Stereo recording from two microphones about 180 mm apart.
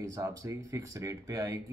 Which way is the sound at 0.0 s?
15° right (ahead or behind).